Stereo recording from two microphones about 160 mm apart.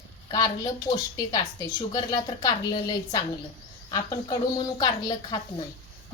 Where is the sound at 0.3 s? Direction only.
25° left (ahead or behind).